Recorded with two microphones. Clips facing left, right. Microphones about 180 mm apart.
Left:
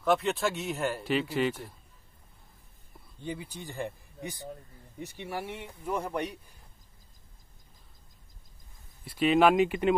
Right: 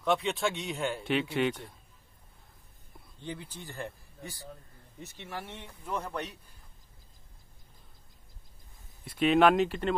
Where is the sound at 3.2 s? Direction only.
10° left (ahead or behind).